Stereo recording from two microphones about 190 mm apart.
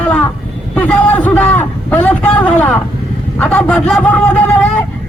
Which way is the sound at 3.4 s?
5° left (ahead or behind).